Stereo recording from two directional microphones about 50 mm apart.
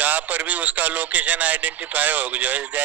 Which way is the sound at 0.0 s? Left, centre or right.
Right.